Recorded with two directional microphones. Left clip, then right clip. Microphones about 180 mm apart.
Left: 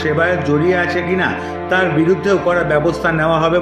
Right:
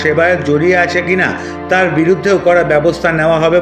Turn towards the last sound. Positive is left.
turn(degrees=-15)  # may be behind; listen again after turning